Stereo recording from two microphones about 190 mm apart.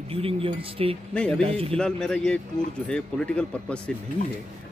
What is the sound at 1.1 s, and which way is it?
Speech, 5° left (ahead or behind).